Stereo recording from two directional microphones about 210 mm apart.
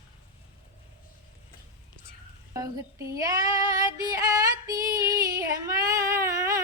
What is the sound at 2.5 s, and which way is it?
Female singing, 15° right (ahead or behind).